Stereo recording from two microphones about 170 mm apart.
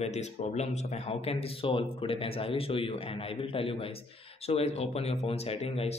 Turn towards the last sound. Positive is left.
turn(degrees=35)  # may be behind; listen again after turning